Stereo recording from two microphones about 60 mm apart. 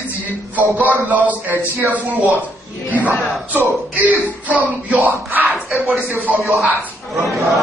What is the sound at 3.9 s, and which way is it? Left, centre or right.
Speech, right.